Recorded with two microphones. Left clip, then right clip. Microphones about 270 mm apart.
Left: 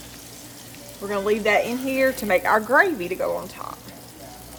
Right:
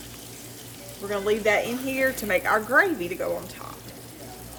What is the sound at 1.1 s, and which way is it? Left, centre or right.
A woman's voice, centre.